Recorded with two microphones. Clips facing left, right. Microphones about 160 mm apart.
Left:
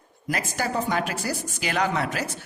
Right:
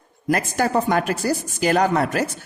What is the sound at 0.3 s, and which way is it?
A woman's voice, 50° right (ahead or behind).